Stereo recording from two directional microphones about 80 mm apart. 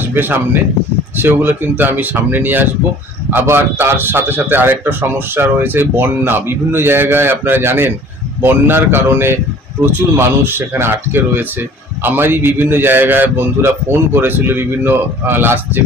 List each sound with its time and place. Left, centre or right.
0.1 s a man's voice: right